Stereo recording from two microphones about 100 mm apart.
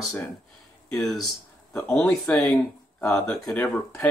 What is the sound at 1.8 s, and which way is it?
Speech, 10° left (ahead or behind).